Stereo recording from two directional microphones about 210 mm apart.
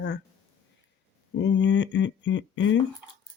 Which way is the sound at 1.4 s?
60° left (ahead or behind).